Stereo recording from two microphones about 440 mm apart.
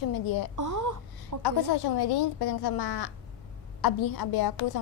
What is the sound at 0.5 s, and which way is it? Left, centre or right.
Speech, right.